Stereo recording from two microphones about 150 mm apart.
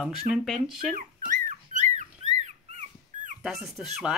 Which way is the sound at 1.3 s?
55° right (ahead or behind).